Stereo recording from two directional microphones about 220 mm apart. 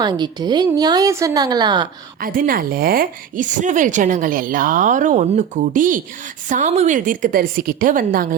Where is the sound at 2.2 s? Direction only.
40° right (ahead or behind).